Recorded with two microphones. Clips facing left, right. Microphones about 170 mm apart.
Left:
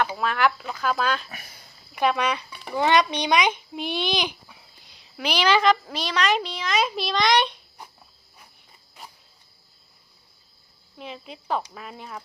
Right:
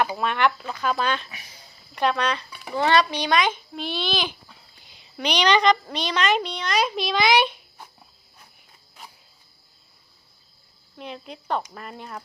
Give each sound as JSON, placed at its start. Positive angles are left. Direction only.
{"t": 0.0, "sound": "a woman's voice", "side_deg": 0}
{"t": 1.3, "sound": "speech", "side_deg": 50}
{"t": 2.0, "sound": "a child's voice", "side_deg": 10}
{"t": 2.5, "sound": "a sound", "side_deg": -5}
{"t": 2.7, "sound": "a child's voice", "side_deg": 15}
{"t": 4.8, "sound": "a woman's voice", "side_deg": 0}
{"t": 10.9, "sound": "a woman's voice", "side_deg": 0}